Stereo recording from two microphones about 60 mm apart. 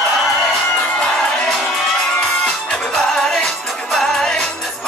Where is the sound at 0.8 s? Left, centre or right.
Centre.